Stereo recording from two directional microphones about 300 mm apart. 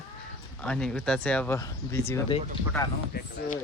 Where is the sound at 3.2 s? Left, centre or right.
Left.